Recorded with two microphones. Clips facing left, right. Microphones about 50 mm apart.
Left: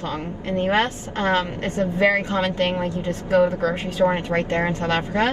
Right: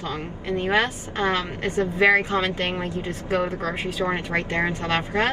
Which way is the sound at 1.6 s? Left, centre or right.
Right.